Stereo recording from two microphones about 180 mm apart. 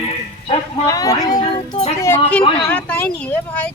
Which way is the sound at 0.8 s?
20° left (ahead or behind).